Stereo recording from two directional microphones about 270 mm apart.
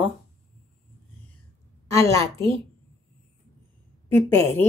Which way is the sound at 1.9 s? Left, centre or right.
Centre.